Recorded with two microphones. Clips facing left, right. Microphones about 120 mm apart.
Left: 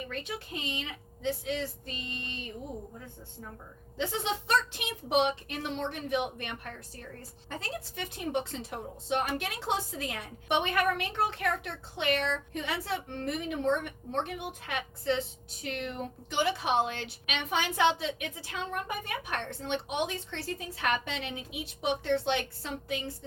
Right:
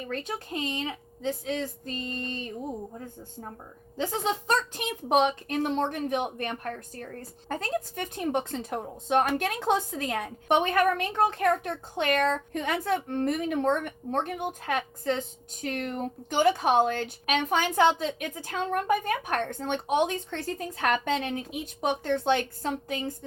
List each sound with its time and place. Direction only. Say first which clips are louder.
0.1 s a woman's voice: right 5 dB; 45° right (ahead or behind)
3.9 s a woman's voice: right 4 dB; 40° right (ahead or behind)